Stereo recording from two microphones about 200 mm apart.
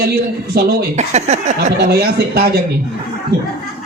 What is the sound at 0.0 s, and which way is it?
Speech, 50° right (ahead or behind).